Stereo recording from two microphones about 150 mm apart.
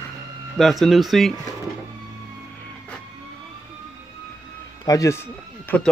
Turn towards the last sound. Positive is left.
turn(degrees=15)  # may be behind; listen again after turning